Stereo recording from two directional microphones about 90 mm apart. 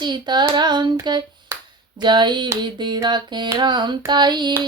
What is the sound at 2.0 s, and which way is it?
Hands, 55° right (ahead or behind).